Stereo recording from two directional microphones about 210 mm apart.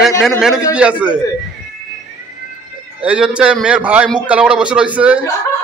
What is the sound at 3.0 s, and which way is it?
A man's voice, 5° right (ahead or behind).